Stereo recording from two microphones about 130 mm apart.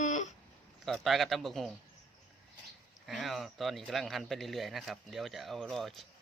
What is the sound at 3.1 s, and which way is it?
Speech, centre (ahead or behind).